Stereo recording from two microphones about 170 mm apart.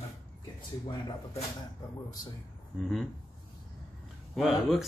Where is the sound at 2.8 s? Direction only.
Centre (ahead or behind).